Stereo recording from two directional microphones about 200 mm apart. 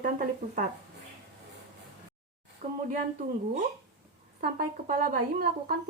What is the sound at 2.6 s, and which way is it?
Speech, 45° right (ahead or behind).